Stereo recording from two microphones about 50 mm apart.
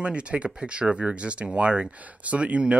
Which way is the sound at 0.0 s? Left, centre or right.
Right.